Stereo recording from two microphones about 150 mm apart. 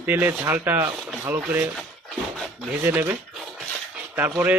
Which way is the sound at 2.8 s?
10° right (ahead or behind).